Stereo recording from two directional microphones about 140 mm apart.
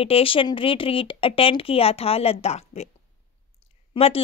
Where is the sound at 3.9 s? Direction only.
45° left (ahead or behind).